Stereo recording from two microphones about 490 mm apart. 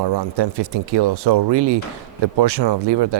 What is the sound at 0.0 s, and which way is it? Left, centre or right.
Speech, right.